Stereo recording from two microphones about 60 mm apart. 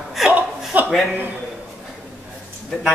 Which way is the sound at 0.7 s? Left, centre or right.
Right.